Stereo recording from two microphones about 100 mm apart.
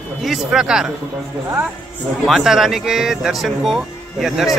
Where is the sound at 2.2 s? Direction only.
5° right (ahead or behind).